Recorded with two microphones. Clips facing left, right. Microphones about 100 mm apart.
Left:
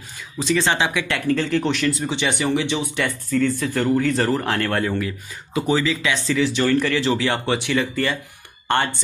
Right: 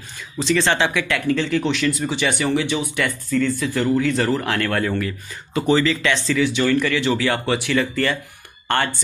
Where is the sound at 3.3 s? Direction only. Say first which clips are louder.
Even; 40° left (ahead or behind).